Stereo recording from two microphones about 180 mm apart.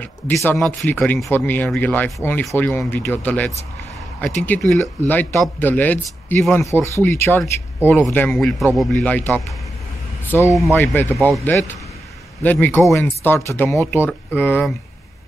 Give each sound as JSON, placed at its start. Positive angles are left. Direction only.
{"t": 0.0, "sound": "a man's voice", "side_deg": 10}